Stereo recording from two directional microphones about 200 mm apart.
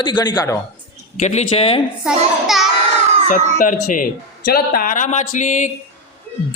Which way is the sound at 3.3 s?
40° left (ahead or behind).